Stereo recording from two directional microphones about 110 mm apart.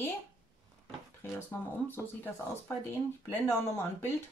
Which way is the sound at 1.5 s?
20° left (ahead or behind).